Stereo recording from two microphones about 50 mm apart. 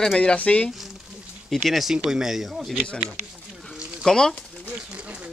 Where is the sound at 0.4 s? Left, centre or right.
Left.